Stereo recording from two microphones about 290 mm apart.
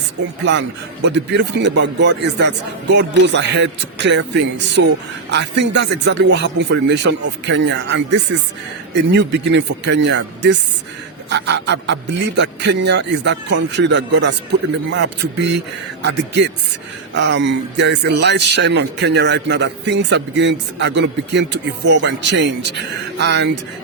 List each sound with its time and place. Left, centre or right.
1.0 s a man's voice: right